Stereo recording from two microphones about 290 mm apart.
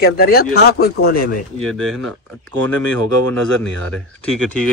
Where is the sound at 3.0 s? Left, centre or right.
Right.